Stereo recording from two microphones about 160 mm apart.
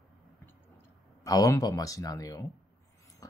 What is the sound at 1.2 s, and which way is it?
Speech, 20° left (ahead or behind).